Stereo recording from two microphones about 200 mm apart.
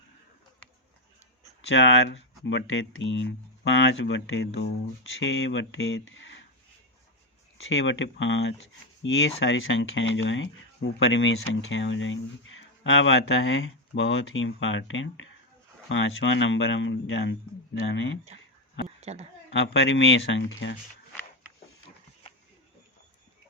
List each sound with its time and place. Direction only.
1.6 s speech: 70° left (ahead or behind)
7.6 s speech: 70° left (ahead or behind)
18.9 s a sound: 35° right (ahead or behind)
19.5 s speech: 70° left (ahead or behind)